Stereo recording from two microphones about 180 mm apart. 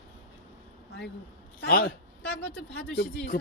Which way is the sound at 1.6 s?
60° left (ahead or behind).